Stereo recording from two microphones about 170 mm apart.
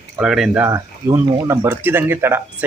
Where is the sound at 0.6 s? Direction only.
15° right (ahead or behind).